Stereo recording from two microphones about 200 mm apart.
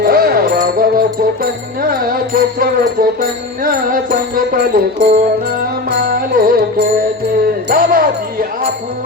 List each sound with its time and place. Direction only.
0.0 s music: 50° right (ahead or behind)
7.7 s music: 45° right (ahead or behind)